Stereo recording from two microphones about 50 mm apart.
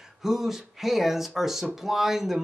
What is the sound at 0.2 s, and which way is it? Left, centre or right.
Speech, centre.